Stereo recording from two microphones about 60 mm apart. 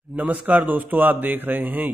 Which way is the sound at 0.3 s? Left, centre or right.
Right.